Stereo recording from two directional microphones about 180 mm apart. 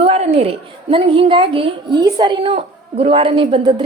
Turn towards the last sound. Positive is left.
turn(degrees=-30)  # may be behind; listen again after turning